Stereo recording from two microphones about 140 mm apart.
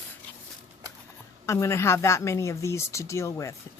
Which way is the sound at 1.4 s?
20° left (ahead or behind).